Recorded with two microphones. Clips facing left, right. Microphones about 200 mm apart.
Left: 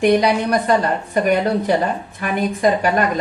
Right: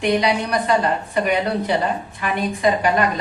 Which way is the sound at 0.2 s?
45° left (ahead or behind).